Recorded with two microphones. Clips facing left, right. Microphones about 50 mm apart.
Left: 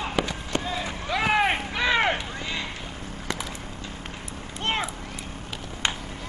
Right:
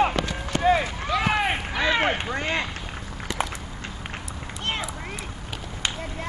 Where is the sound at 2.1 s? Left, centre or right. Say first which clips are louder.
Right 5 dB; right.